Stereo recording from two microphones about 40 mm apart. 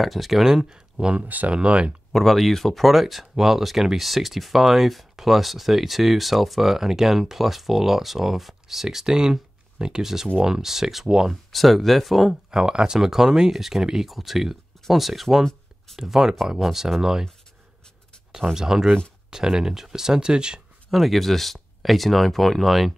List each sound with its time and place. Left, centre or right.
0.0 s speech: centre
1.2 s speech: right
1.5 s speech: right
2.1 s speech: centre
11.5 s speech: centre
12.4 s speech: centre
16.0 s speech: centre
18.5 s speech: centre
20.9 s speech: centre